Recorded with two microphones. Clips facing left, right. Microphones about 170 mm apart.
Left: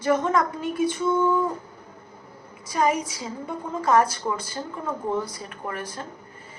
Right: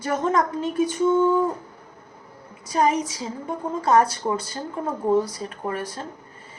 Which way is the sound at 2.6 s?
40° right (ahead or behind).